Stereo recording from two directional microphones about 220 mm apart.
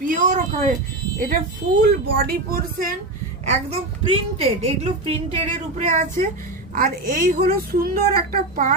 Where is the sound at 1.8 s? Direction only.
45° right (ahead or behind).